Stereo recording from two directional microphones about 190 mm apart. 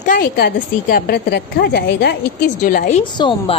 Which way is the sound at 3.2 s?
25° left (ahead or behind).